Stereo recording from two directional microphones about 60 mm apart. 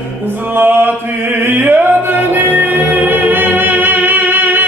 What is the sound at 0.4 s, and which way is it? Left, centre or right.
Music, right.